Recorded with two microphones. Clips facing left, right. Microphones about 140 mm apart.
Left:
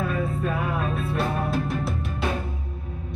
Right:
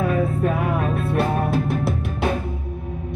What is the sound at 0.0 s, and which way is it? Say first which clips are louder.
Music: right 6 dB; 65° right (ahead or behind).